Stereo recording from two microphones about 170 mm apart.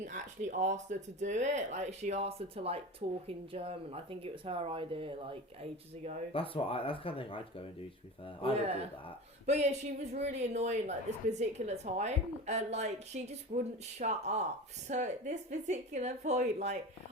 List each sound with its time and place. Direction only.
0.0 s a woman's voice: 45° right (ahead or behind)
6.3 s speech: 30° left (ahead or behind)
9.5 s a woman's voice: 40° right (ahead or behind)